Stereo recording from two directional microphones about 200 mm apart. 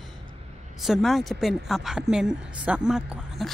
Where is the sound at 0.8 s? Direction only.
Centre (ahead or behind).